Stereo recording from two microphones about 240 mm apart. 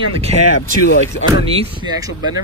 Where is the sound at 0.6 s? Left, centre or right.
Left.